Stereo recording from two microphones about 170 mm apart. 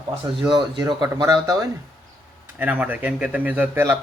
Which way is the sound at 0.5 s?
25° right (ahead or behind).